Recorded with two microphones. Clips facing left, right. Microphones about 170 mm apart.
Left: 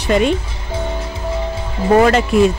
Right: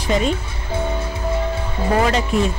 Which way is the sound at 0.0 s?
70° left (ahead or behind).